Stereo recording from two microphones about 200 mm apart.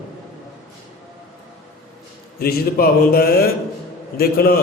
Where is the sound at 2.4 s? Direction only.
50° left (ahead or behind).